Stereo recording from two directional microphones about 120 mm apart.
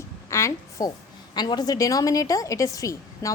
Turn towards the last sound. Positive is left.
turn(degrees=25)  # may be behind; listen again after turning